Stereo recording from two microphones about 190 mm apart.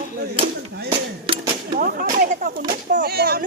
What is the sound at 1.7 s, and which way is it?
Speech, 50° right (ahead or behind).